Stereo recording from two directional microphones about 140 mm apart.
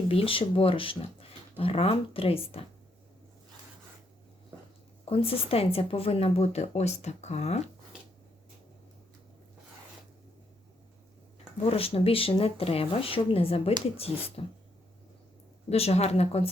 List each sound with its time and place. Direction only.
0.1 s speech: 40° left (ahead or behind)
5.0 s speech: 40° left (ahead or behind)
11.7 s speech: 45° left (ahead or behind)
15.7 s speech: 45° left (ahead or behind)